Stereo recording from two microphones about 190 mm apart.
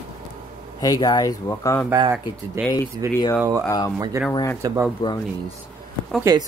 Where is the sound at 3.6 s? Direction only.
15° left (ahead or behind).